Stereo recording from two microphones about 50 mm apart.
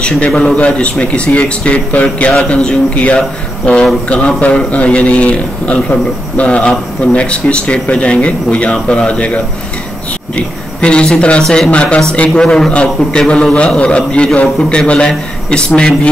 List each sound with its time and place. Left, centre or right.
0.6 s a man's voice: left
2.5 s speech: centre
2.9 s a man's voice: left